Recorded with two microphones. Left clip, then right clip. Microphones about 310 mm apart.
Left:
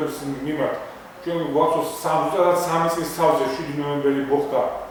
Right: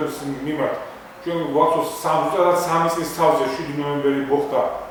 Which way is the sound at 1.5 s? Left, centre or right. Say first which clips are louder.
Right 2 dB; right.